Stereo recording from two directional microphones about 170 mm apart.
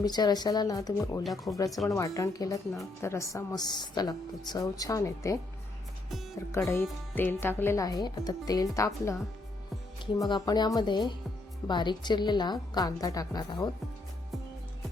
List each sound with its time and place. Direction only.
0.0 s a woman's voice: 25° left (ahead or behind)
1.2 s speech: centre (ahead or behind)
1.5 s a woman's voice: 20° left (ahead or behind)
6.5 s a woman's voice: 15° left (ahead or behind)
10.2 s a woman's voice: 25° left (ahead or behind)